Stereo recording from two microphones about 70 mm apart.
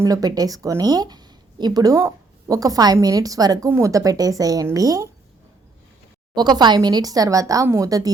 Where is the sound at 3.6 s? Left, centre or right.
Right.